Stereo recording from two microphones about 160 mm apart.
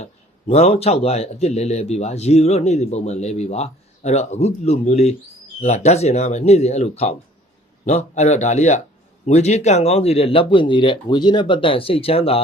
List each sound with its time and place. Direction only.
0.0 s speech: 40° left (ahead or behind)